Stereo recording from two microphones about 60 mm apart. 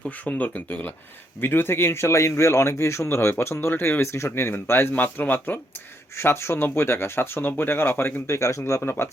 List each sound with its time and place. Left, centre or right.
0.0 s speech: left
1.4 s speech: left
6.1 s speech: left
8.3 s speech: left
8.8 s speech: left